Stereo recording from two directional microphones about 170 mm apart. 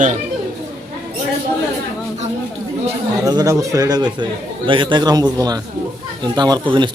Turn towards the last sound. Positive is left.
turn(degrees=-30)  # may be behind; listen again after turning